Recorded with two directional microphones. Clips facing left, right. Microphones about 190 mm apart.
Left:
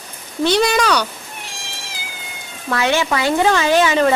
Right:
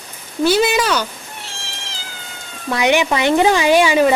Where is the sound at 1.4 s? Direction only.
15° left (ahead or behind).